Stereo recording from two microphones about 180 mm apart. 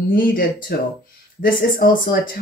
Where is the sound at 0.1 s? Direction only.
55° left (ahead or behind).